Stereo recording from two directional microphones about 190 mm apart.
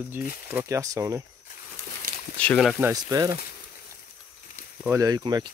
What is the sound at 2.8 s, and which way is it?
Speech, 20° right (ahead or behind).